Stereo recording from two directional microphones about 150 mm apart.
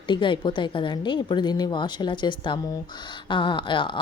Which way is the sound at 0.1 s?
30° left (ahead or behind).